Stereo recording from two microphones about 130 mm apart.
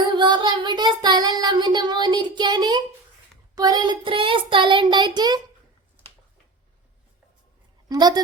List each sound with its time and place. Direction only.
0.0 s child singing: 35° right (ahead or behind)
7.9 s a woman's voice: 30° right (ahead or behind)